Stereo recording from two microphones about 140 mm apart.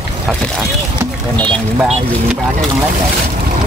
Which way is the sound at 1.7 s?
5° right (ahead or behind).